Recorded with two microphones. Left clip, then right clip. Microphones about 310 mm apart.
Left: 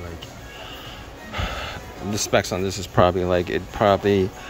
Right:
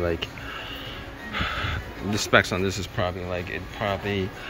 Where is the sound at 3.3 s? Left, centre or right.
Left.